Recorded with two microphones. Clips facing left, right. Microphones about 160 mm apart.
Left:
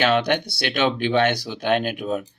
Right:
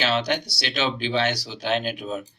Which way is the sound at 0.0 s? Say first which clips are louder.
Left 4 dB; 55° left (ahead or behind).